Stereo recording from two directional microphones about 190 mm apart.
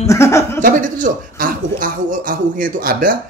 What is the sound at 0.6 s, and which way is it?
A man's voice, 45° right (ahead or behind).